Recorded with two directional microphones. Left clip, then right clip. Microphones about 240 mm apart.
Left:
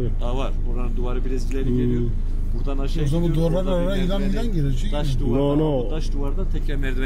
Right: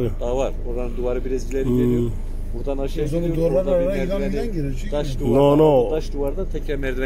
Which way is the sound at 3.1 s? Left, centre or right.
Left.